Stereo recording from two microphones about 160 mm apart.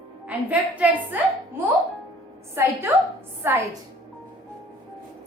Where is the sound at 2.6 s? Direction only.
15° right (ahead or behind).